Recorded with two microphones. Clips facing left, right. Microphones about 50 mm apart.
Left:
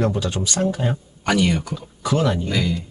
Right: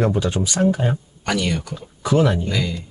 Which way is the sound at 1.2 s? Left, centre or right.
Centre.